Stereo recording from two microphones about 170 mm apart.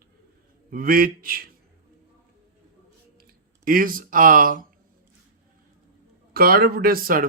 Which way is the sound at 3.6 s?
55° right (ahead or behind).